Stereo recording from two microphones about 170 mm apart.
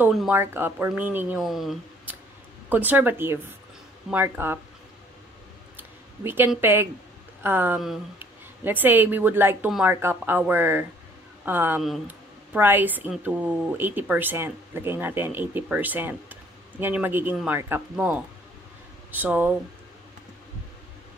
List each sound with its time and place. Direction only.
0.0 s speech: centre (ahead or behind)
0.3 s a woman's voice: 10° right (ahead or behind)
5.8 s a sound: 10° right (ahead or behind)
6.6 s a woman's voice: 10° right (ahead or behind)